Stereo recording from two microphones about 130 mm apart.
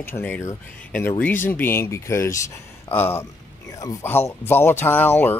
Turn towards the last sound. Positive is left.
turn(degrees=15)  # may be behind; listen again after turning